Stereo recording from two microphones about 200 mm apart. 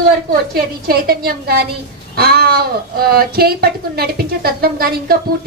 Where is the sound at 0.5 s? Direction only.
50° right (ahead or behind).